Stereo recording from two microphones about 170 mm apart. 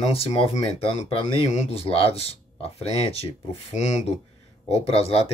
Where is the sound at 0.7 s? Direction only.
30° left (ahead or behind).